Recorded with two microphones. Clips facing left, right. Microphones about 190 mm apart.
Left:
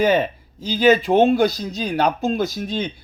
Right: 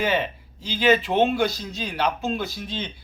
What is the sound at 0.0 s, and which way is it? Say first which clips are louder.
Speech: left 6 dB; 40° left (ahead or behind).